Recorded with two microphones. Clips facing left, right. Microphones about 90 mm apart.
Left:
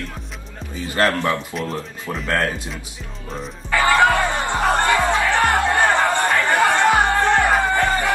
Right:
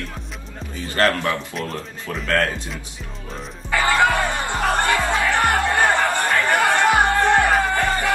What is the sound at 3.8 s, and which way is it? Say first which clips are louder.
Music: left 2 dB; 20° left (ahead or behind).